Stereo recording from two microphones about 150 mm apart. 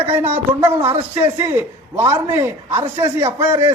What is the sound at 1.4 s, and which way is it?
A man's voice, 15° right (ahead or behind).